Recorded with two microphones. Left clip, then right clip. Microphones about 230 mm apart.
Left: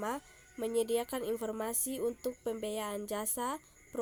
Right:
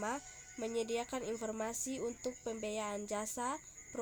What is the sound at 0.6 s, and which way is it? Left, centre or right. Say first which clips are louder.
Speech: left 5 dB; centre.